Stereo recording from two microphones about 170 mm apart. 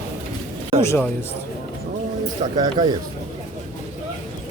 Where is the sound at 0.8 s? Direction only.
15° left (ahead or behind).